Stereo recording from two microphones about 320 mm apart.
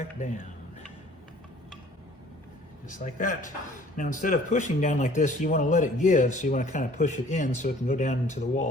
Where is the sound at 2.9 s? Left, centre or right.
Left.